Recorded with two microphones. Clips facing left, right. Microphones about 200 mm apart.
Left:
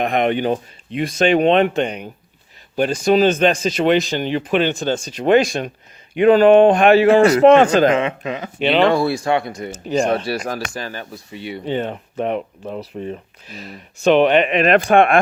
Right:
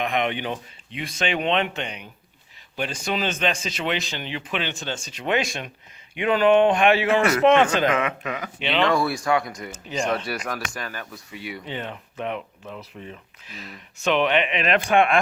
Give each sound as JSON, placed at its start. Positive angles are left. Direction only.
{"t": 0.0, "sound": "speech", "side_deg": 40}
{"t": 8.5, "sound": "speech", "side_deg": 45}
{"t": 8.8, "sound": "speech", "side_deg": 30}